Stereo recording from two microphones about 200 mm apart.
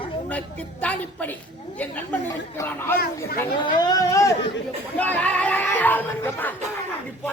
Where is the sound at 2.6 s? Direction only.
10° left (ahead or behind).